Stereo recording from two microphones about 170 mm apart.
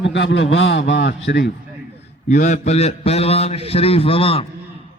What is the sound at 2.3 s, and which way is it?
A man's voice, 50° left (ahead or behind).